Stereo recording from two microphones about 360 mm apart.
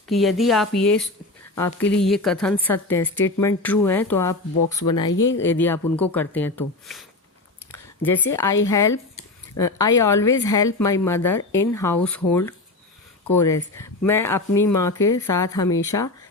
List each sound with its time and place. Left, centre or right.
0.1 s a woman's voice: centre